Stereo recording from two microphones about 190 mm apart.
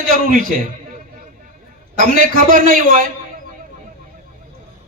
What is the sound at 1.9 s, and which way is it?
Speech, 50° right (ahead or behind).